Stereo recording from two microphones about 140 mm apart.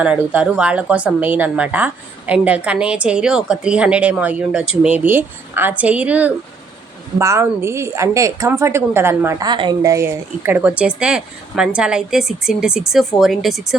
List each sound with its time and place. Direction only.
0.0 s a woman's voice: 10° right (ahead or behind)
9.5 s speech: 30° right (ahead or behind); by 13.7 s centre (ahead or behind)